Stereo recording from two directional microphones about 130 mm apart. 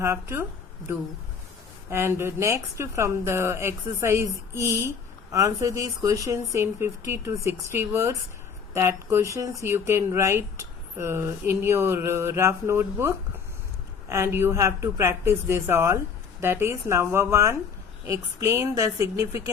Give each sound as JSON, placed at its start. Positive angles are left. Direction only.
{"t": 0.0, "sound": "speech", "side_deg": -20}
{"t": 1.9, "sound": "speech", "side_deg": -20}